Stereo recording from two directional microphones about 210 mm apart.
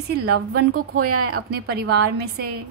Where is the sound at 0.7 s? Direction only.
90° right.